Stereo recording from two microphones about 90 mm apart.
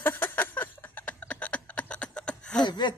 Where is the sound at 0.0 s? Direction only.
20° left (ahead or behind).